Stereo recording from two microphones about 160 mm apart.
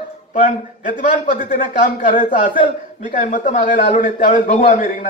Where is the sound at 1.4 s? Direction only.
55° left (ahead or behind).